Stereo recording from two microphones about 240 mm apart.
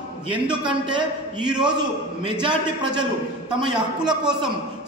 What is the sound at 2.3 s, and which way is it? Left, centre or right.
Speech, centre.